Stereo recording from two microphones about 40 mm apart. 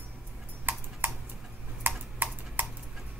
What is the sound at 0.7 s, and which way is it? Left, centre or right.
Tick-tock, right.